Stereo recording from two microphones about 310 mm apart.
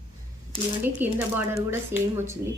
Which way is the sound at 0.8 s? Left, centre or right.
Centre.